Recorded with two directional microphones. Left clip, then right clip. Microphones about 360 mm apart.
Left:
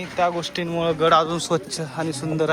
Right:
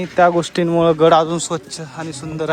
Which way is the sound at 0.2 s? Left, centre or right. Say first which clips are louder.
Right 8 dB; right.